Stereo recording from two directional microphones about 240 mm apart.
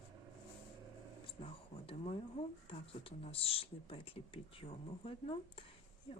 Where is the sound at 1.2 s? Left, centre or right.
Left.